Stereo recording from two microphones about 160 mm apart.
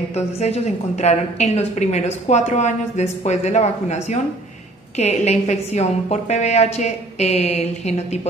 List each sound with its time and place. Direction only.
0.1 s a woman's voice: 40° left (ahead or behind)